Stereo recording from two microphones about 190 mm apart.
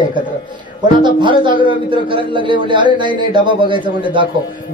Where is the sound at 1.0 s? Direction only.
25° right (ahead or behind).